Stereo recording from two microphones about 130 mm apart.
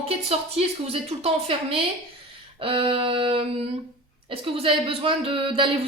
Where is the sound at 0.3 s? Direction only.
50° right (ahead or behind).